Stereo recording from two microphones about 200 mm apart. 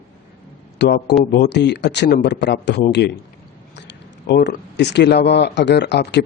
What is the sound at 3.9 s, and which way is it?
Speech, 60° left (ahead or behind).